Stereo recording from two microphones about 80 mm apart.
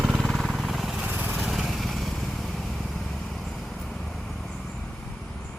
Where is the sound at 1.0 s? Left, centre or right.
Right.